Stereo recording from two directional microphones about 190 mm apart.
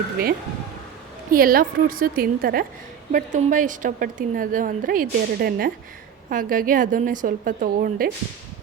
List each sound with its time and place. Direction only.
1.3 s a woman's voice: 50° right (ahead or behind)